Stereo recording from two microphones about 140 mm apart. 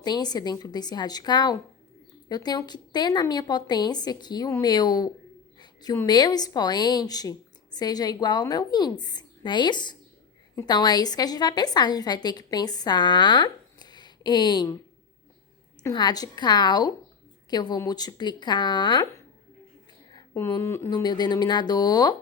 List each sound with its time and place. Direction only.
0.0 s a woman's voice: 30° left (ahead or behind)
5.5 s a sound: 30° left (ahead or behind)
6.1 s a woman's voice: 30° left (ahead or behind)
15.9 s a woman's voice: 30° left (ahead or behind)
20.3 s a woman's voice: 20° left (ahead or behind)